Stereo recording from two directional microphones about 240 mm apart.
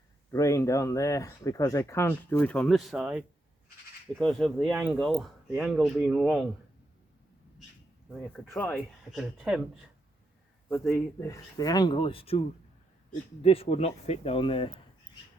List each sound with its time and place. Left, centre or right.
0.3 s speech: centre
8.4 s speech: centre
8.7 s speech: centre
10.7 s speech: centre
13.4 s speech: left